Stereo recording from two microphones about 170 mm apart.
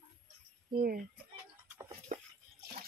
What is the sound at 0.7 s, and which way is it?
Speech, 60° right (ahead or behind).